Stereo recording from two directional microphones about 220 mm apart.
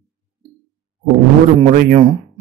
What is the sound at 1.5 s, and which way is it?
Speech, 35° right (ahead or behind).